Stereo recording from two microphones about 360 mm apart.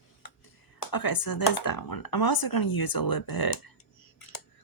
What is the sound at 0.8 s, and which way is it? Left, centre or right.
Speech, left.